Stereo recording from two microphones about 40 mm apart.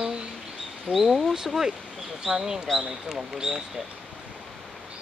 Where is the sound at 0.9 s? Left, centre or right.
Centre.